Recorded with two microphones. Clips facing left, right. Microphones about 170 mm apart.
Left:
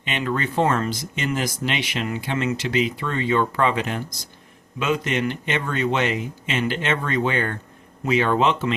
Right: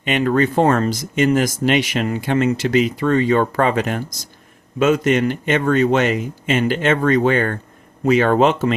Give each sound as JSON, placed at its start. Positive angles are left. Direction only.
{"t": 0.0, "sound": "speech", "side_deg": -50}